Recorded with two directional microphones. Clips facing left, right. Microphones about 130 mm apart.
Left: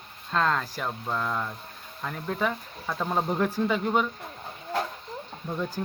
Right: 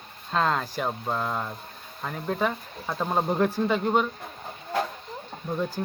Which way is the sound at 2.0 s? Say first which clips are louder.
Right 2 dB; 5° right (ahead or behind).